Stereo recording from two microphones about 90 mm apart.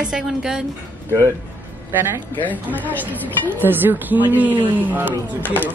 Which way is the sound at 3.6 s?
20° right (ahead or behind).